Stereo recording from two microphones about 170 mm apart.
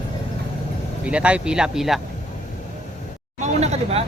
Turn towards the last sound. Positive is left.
turn(degrees=-40)  # may be behind; listen again after turning